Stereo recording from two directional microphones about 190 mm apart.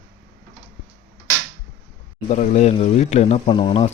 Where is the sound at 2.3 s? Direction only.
40° left (ahead or behind).